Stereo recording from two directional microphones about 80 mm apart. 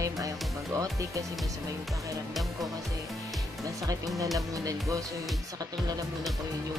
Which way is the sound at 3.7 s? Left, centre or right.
Right.